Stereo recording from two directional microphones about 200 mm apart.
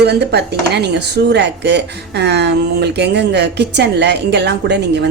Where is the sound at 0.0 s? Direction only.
55° right (ahead or behind).